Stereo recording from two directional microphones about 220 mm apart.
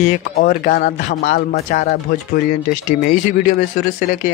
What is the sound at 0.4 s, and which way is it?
Speech, 45° left (ahead or behind).